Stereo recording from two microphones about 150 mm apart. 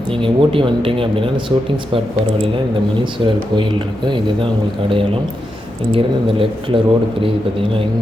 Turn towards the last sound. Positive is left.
turn(degrees=-35)  # may be behind; listen again after turning